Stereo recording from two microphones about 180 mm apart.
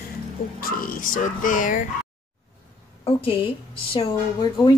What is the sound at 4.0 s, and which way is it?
Speech, 30° left (ahead or behind).